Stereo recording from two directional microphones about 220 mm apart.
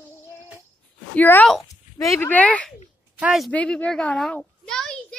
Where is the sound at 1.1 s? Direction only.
10° left (ahead or behind).